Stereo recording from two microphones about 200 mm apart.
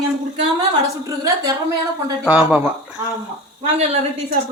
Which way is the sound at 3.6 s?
30° right (ahead or behind).